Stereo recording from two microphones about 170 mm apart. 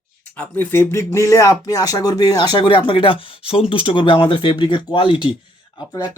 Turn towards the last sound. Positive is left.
turn(degrees=20)  # may be behind; listen again after turning